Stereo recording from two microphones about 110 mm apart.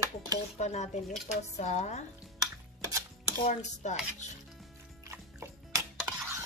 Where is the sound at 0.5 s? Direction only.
90° left.